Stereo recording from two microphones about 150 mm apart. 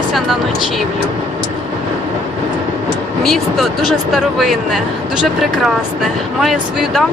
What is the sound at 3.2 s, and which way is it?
Speech, centre (ahead or behind).